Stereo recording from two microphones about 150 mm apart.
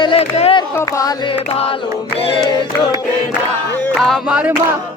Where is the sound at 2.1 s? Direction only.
40° left (ahead or behind).